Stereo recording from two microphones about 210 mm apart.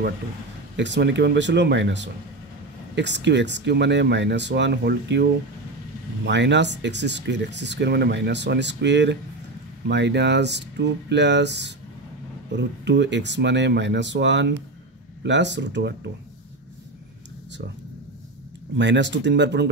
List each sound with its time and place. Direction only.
0.7 s speech: 55° right (ahead or behind)
18.8 s speech: 55° right (ahead or behind)